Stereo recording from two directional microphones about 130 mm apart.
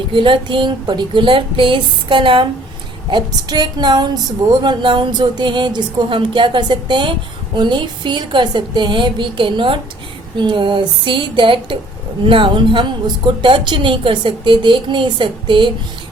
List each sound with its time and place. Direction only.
0.1 s speech: 40° right (ahead or behind)